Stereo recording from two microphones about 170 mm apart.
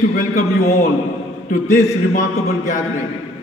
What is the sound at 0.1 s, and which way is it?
Speech, 55° left (ahead or behind).